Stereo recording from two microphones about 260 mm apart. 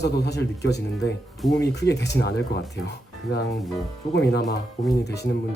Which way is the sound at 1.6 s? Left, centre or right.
Left.